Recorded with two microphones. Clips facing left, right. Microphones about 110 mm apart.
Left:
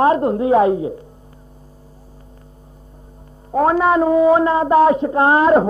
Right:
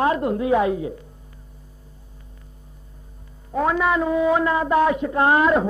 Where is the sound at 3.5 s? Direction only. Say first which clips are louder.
Left 6 dB; 40° left (ahead or behind).